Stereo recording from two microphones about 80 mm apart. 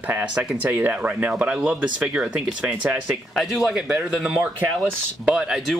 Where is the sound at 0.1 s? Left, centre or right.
Centre.